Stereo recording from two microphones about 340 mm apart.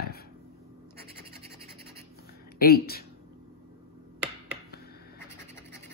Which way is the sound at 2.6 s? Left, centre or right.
Left.